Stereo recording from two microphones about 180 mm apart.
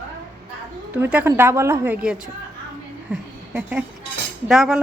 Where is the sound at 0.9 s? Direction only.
10° right (ahead or behind).